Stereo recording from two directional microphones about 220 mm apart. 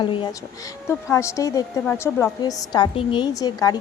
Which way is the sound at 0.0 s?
20° left (ahead or behind).